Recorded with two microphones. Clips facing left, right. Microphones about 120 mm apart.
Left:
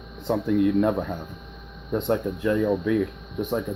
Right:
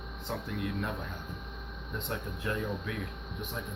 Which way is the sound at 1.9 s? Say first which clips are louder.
Left 14 dB; 55° left (ahead or behind).